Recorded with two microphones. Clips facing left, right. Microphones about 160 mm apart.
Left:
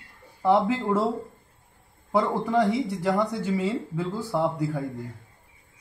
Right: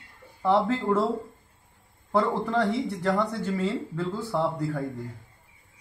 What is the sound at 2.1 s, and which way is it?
A man's voice, 10° left (ahead or behind).